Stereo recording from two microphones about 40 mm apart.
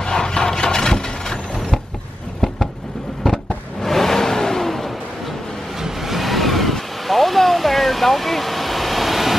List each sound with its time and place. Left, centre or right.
0.0 s a sound: centre
3.3 s vehicle: centre
5.8 s vehicle: centre